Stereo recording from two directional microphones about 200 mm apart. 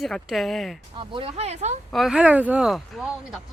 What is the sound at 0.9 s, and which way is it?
Speech, 25° right (ahead or behind).